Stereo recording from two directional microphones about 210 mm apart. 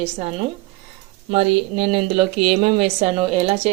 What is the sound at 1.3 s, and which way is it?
Speech, 30° right (ahead or behind).